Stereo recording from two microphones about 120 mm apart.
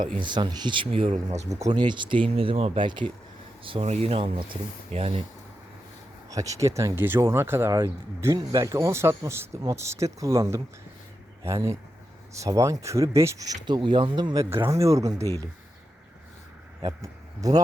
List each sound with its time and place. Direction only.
0.2 s speech: 40° right (ahead or behind); by 1.5 s 70° right (ahead or behind)
1.7 s speech: 40° right (ahead or behind)
6.3 s speech: 25° right (ahead or behind)
14.5 s speech: 20° right (ahead or behind)
16.8 s a man's voice: 30° right (ahead or behind)